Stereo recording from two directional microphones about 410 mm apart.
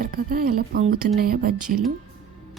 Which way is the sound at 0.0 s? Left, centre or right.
Right.